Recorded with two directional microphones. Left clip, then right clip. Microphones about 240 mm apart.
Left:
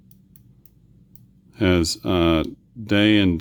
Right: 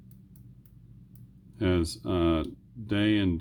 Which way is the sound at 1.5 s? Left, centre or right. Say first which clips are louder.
Left 8 dB; left.